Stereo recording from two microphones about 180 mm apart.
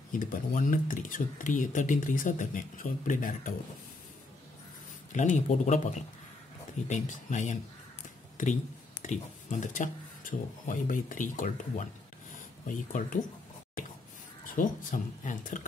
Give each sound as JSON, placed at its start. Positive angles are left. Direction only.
{"t": 0.1, "sound": "speech", "side_deg": 50}
{"t": 5.1, "sound": "speech", "side_deg": 45}
{"t": 9.0, "sound": "speech", "side_deg": 40}
{"t": 14.5, "sound": "speech", "side_deg": 45}